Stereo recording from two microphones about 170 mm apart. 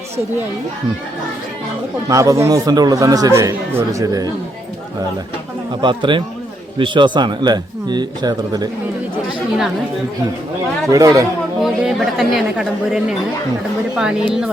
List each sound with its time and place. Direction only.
2.0 s speech: 20° right (ahead or behind)
5.8 s speech: 30° right (ahead or behind)
10.8 s speech: 20° right (ahead or behind)
11.6 s speech: centre (ahead or behind)